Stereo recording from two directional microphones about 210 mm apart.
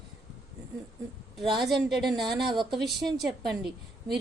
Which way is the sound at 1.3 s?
Centre (ahead or behind).